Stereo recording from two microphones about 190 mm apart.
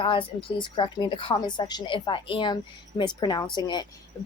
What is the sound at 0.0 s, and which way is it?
Speech, 25° left (ahead or behind).